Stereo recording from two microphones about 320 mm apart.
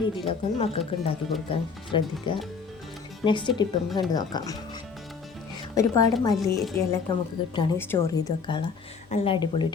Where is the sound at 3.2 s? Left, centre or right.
Centre.